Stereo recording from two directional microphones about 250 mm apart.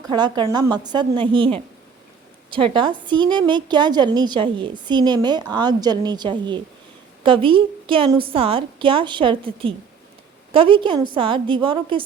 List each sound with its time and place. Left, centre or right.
0.0 s a woman's voice: centre